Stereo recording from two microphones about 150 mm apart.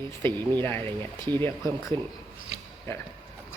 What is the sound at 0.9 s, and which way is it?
Speech, 30° right (ahead or behind).